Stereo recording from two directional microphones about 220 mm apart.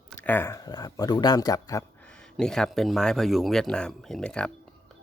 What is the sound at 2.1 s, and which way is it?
Speech, 5° left (ahead or behind).